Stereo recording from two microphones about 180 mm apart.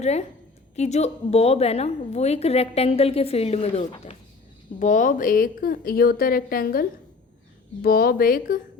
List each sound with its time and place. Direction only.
0.0 s a woman's voice: 40° left (ahead or behind)
4.8 s a woman's voice: 45° left (ahead or behind)